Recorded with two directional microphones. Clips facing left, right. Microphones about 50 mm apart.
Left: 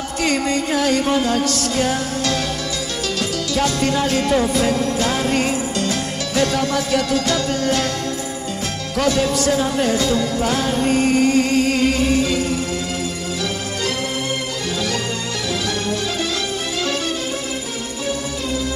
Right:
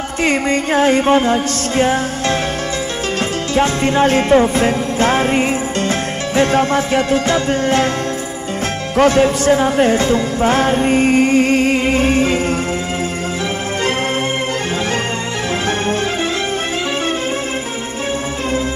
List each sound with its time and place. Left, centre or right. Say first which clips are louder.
0.2 s music: right 4 dB; right
3.5 s music: right 5 dB; right
8.9 s speech: right 6 dB; right